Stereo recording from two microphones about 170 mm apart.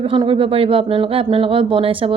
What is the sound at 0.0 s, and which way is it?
Speech, 30° right (ahead or behind).